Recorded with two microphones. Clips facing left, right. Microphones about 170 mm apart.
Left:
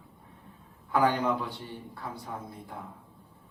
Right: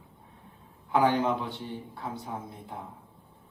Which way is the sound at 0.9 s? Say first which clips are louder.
Right 1 dB; 20° right (ahead or behind).